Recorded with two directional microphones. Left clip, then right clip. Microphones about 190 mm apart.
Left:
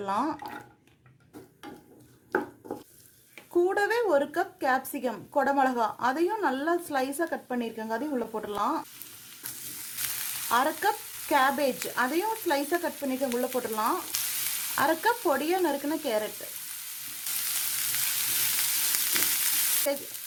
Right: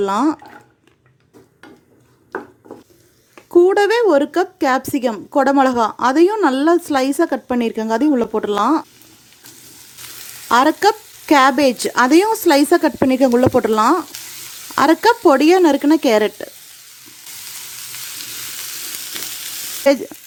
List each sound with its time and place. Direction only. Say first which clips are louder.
0.0 s speech: right 12 dB; 40° right (ahead or behind)
3.5 s a woman's voice: right 13 dB; 40° right (ahead or behind)
10.5 s a woman's voice: right 13 dB; 45° right (ahead or behind)